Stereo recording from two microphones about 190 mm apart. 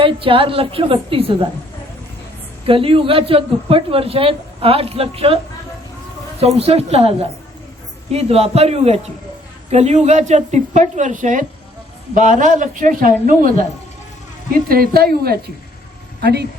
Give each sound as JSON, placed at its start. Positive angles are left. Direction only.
{"t": 0.0, "sound": "a man's voice", "side_deg": -30}
{"t": 2.6, "sound": "a man's voice", "side_deg": -30}
{"t": 6.6, "sound": "a woman's voice", "side_deg": -35}